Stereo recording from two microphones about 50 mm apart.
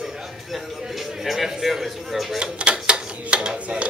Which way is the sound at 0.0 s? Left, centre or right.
Centre.